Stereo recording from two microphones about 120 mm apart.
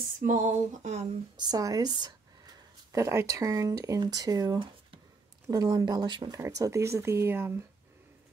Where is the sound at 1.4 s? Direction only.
30° right (ahead or behind).